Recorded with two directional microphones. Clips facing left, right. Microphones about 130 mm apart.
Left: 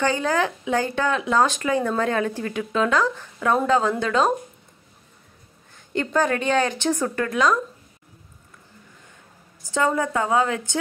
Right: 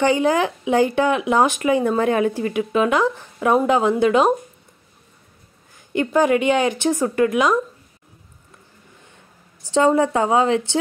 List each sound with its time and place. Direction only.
0.0 s speech: 15° right (ahead or behind)
5.9 s speech: 15° right (ahead or behind)
9.8 s a woman's voice: 25° right (ahead or behind)